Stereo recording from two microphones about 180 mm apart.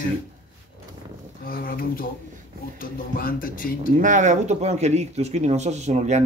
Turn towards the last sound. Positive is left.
turn(degrees=-40)  # may be behind; listen again after turning